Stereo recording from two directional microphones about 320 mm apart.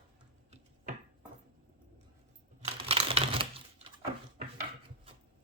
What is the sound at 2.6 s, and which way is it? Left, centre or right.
Typing, centre.